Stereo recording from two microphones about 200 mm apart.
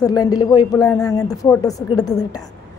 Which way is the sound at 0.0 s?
20° left (ahead or behind).